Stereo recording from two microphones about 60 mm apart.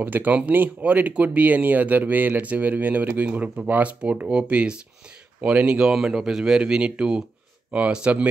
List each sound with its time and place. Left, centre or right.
0.0 s speech: right
3.3 s speech: centre